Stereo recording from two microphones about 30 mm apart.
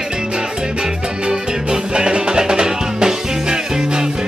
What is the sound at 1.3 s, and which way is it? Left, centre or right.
Music, right.